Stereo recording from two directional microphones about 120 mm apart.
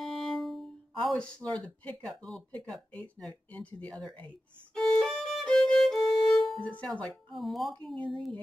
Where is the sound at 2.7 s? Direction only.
10° left (ahead or behind).